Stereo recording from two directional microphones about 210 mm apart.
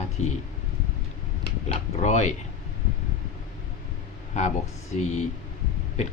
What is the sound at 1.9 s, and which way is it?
Speech, 35° left (ahead or behind).